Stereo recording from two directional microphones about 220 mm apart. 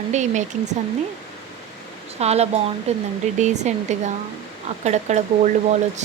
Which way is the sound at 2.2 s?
30° right (ahead or behind).